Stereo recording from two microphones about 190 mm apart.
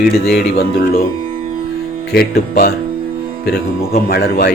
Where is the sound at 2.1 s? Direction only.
55° left (ahead or behind).